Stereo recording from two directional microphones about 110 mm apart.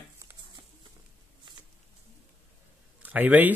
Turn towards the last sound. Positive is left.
turn(degrees=-15)  # may be behind; listen again after turning